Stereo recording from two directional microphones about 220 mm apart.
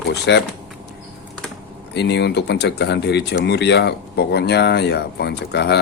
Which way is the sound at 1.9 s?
50° left (ahead or behind).